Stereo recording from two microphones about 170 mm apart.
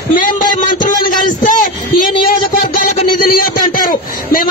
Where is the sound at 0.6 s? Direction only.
50° left (ahead or behind).